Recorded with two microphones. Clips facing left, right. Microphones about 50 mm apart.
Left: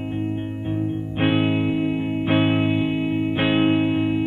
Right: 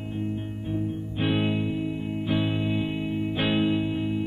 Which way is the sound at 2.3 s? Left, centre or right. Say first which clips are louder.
Left 7 dB; left.